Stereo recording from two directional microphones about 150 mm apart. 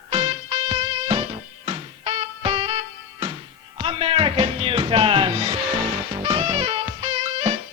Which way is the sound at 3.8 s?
35° right (ahead or behind).